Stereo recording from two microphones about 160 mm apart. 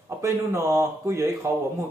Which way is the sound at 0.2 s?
15° right (ahead or behind).